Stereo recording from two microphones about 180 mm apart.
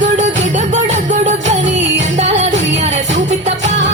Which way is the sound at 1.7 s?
90° right.